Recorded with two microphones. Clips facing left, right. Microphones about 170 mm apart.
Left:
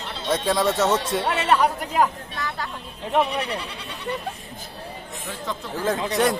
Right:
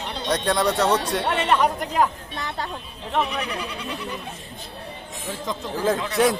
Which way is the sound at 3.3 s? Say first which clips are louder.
Left 2 dB; 30° left (ahead or behind).